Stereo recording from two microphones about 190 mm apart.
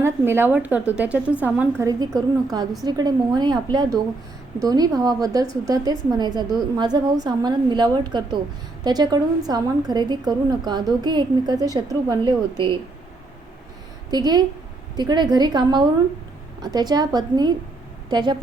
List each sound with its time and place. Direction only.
0.0 s a woman's voice: 10° right (ahead or behind)
14.1 s a woman's voice: 20° right (ahead or behind)